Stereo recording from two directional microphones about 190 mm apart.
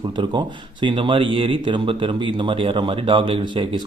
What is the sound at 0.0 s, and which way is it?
Speech, 25° right (ahead or behind).